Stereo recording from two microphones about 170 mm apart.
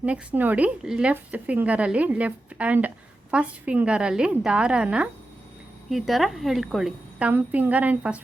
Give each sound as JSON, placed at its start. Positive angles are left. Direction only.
{"t": 0.0, "sound": "a woman's voice", "side_deg": -10}